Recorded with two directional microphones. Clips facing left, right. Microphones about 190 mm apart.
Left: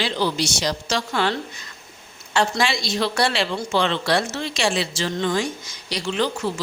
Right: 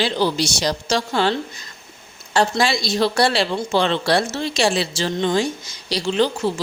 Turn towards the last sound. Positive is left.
turn(degrees=-30)  # may be behind; listen again after turning